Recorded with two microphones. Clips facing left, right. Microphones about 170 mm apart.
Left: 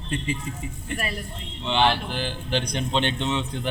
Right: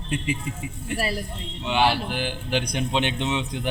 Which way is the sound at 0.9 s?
35° right (ahead or behind).